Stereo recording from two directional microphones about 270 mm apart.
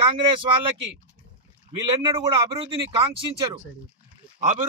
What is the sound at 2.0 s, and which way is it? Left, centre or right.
Speech, centre.